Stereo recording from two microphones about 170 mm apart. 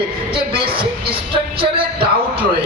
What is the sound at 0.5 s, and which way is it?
Speech, 30° right (ahead or behind).